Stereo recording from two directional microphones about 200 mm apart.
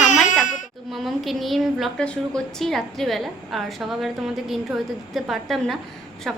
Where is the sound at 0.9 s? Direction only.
Centre (ahead or behind).